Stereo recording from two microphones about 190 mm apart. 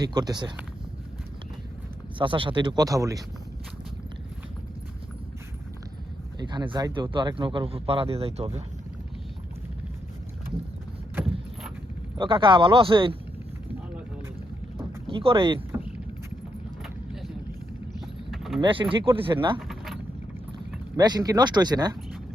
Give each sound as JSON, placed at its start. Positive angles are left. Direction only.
{"t": 0.0, "sound": "speech", "side_deg": -20}
{"t": 2.1, "sound": "speech", "side_deg": -25}
{"t": 6.4, "sound": "speech", "side_deg": -25}
{"t": 12.1, "sound": "speech", "side_deg": -25}
{"t": 15.0, "sound": "speech", "side_deg": -30}
{"t": 18.0, "sound": "vehicle", "side_deg": 0}
{"t": 18.6, "sound": "speech", "side_deg": -25}
{"t": 19.5, "sound": "keys jangling", "side_deg": 0}
{"t": 20.9, "sound": "speech", "side_deg": -20}